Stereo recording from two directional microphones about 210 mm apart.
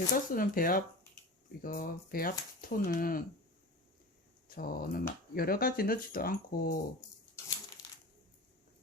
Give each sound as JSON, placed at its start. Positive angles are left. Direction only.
{"t": 0.1, "sound": "speech", "side_deg": 40}
{"t": 4.4, "sound": "speech", "side_deg": 45}